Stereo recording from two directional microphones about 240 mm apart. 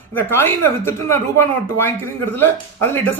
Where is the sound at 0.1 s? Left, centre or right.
Centre.